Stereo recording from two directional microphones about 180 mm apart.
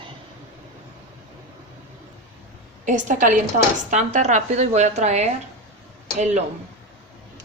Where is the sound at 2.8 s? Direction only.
45° right (ahead or behind).